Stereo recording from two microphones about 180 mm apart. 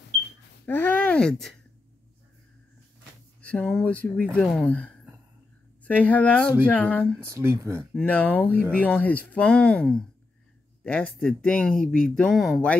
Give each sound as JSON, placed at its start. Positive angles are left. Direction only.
{"t": 0.7, "sound": "speech", "side_deg": 10}
{"t": 3.3, "sound": "speech", "side_deg": 5}
{"t": 7.2, "sound": "speech", "side_deg": -15}
{"t": 7.9, "sound": "speech", "side_deg": 10}